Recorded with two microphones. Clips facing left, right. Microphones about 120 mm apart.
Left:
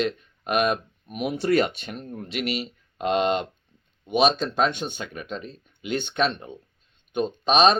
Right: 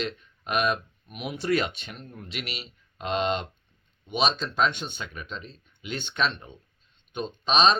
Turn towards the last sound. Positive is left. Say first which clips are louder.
# left 3 dB
turn(degrees=45)  # may be behind; listen again after turning